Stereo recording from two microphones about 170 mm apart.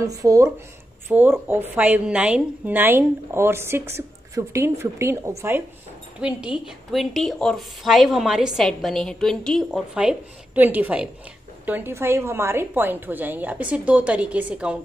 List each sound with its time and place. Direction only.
0.0 s a woman's voice: 20° right (ahead or behind)